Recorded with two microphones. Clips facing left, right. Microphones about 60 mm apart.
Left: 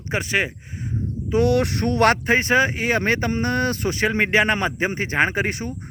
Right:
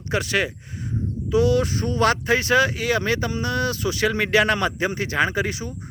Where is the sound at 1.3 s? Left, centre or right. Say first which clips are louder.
Even; left.